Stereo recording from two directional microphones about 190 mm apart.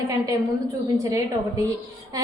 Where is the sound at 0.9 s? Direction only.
15° right (ahead or behind).